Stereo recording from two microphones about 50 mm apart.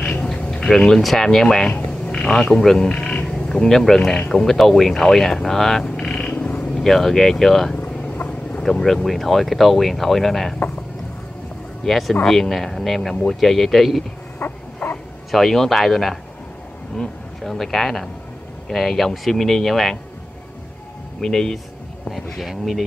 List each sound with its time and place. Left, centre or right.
0.1 s a sound: left
0.7 s speech: centre
1.9 s a sound: centre
2.5 s speech: centre
8.1 s vehicle: left
8.8 s speech: centre
11.8 s speech: centre
14.4 s frog: left
14.8 s bow-wow: left
15.3 s speech: centre
21.2 s speech: centre